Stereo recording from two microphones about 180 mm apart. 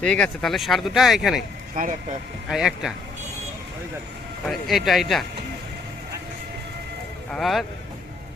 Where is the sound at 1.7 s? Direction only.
45° right (ahead or behind).